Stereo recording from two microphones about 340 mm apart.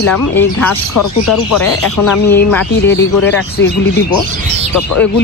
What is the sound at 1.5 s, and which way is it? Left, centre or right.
Speech, left.